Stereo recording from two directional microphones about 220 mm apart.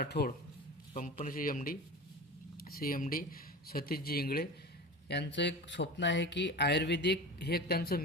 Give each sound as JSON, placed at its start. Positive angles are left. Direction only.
{"t": 0.0, "sound": "speech", "side_deg": 45}